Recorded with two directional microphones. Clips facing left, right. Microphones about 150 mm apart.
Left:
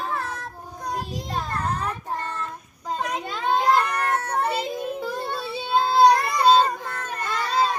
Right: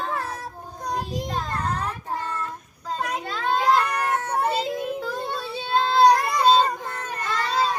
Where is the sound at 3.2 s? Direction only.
15° left (ahead or behind).